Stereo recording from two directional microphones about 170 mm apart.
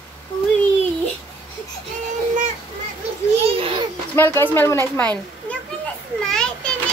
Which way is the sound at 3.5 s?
35° right (ahead or behind).